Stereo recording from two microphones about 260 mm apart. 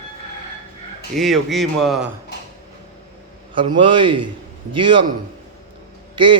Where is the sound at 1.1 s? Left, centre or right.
Centre.